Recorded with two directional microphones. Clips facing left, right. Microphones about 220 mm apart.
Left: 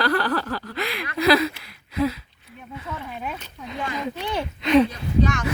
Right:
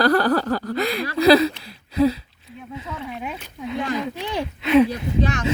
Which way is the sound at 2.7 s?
20° right (ahead or behind).